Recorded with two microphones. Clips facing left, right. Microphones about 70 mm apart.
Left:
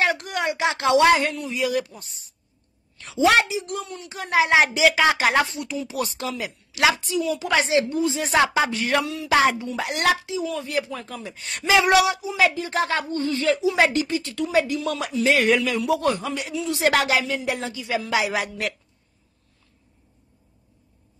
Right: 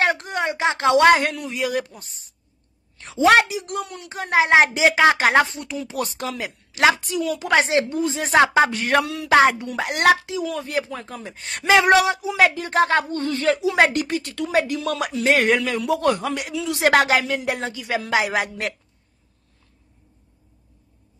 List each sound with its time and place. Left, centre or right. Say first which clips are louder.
0.0 s a sound: right 2 dB; right
0.3 s a sound: right 1 dB; right
0.8 s a woman's voice: right 2 dB; right
3.4 s speech: right 1 dB; right
4.1 s speech: right 2 dB; right
12.4 s speech: right 4 dB; right
15.2 s speech: right 1 dB; right